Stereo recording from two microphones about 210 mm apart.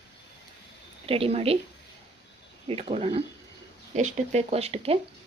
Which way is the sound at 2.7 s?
25° right (ahead or behind).